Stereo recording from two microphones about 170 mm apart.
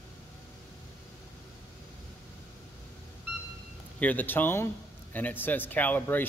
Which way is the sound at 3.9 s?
10° left (ahead or behind).